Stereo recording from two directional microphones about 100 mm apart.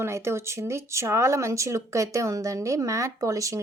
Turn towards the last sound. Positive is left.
turn(degrees=-35)  # may be behind; listen again after turning